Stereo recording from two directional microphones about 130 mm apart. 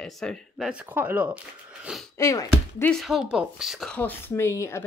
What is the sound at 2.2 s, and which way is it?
Speech, 25° left (ahead or behind).